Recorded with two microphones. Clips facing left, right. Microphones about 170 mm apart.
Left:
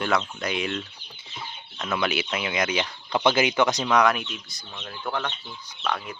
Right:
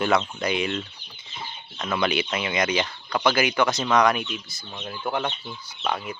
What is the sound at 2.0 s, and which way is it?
Speech, 5° left (ahead or behind).